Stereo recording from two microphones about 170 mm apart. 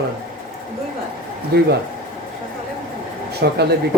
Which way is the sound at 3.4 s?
70° right (ahead or behind).